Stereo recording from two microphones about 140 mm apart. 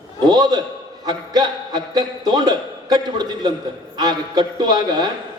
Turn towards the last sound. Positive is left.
turn(degrees=-30)  # may be behind; listen again after turning